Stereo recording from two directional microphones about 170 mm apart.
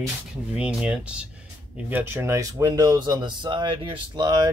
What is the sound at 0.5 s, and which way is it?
Speech, 5° right (ahead or behind).